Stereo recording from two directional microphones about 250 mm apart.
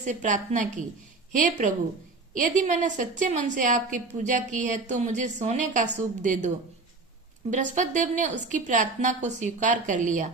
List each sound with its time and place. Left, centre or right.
0.0 s a woman's voice: right
7.5 s a woman's voice: right